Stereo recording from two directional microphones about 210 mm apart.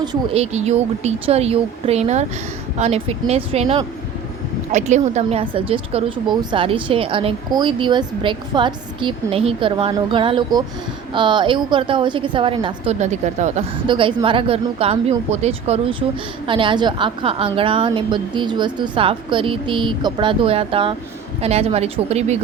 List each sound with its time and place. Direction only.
0.0 s speech: 20° right (ahead or behind)
0.5 s speech: 30° right (ahead or behind)
13.8 s speech: 20° right (ahead or behind)